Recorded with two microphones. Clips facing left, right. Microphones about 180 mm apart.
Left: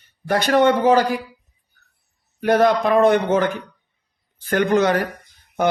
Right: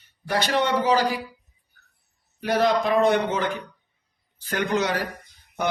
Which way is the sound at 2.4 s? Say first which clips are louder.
Left 5 dB; 55° left (ahead or behind).